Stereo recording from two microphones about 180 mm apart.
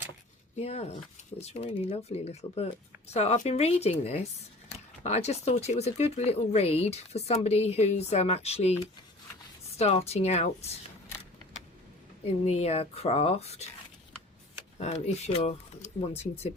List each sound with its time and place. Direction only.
0.5 s speech: 35° left (ahead or behind)
12.5 s speech: 35° left (ahead or behind)
14.8 s speech: 35° left (ahead or behind)